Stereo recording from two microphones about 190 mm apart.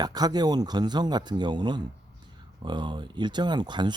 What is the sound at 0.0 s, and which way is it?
Speech, 20° right (ahead or behind).